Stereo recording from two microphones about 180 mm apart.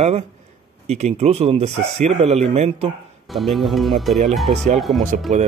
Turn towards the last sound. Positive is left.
turn(degrees=-40)  # may be behind; listen again after turning